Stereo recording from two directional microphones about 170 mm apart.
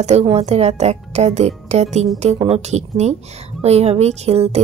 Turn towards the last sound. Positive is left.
turn(degrees=-35)  # may be behind; listen again after turning